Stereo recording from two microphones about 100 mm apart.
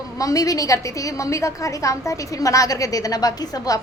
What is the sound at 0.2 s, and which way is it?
A woman's voice, 35° left (ahead or behind).